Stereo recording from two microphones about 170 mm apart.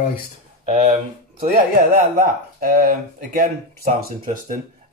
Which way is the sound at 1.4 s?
55° right (ahead or behind).